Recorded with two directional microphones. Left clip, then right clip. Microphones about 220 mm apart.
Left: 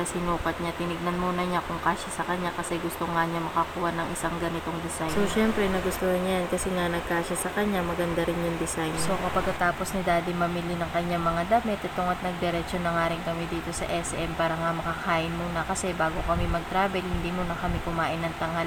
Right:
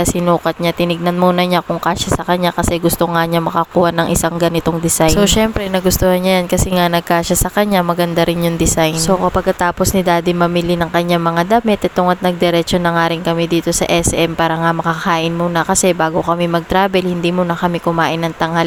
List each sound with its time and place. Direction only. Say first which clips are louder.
0.3 s speech: right 14 dB; 45° right (ahead or behind)
4.9 s speech: right 14 dB; 45° right (ahead or behind)
9.6 s speech: right 12 dB; 45° right (ahead or behind)